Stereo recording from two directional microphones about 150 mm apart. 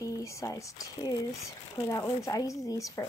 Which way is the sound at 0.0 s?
20° left (ahead or behind).